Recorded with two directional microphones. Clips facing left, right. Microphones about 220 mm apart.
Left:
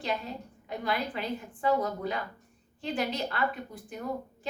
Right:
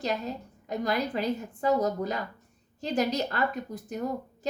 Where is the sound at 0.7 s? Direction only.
40° right (ahead or behind).